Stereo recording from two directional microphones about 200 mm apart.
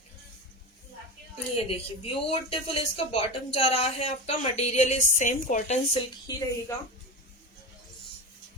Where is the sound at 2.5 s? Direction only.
30° left (ahead or behind).